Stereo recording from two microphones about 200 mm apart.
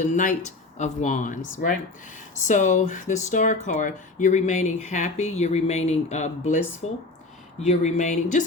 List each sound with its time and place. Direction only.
0.0 s speech: 40° left (ahead or behind)
2.5 s speech: 40° left (ahead or behind)